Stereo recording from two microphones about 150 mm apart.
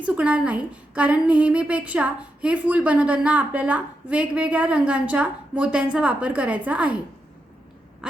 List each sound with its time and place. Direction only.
0.0 s a woman's voice: 10° right (ahead or behind)